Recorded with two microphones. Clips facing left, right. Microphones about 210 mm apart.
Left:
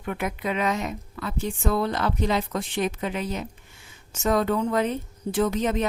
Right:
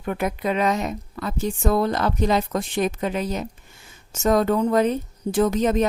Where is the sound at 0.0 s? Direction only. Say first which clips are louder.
Right 4 dB; 40° right (ahead or behind).